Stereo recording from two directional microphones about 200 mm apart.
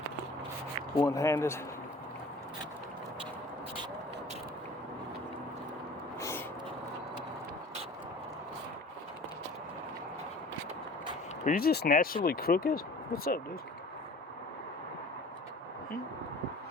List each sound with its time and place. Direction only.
0.9 s speech: 15° left (ahead or behind)
6.1 s a sound: 15° left (ahead or behind)
11.4 s speech: 50° left (ahead or behind)